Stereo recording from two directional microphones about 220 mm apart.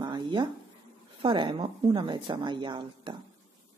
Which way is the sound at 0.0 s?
20° right (ahead or behind).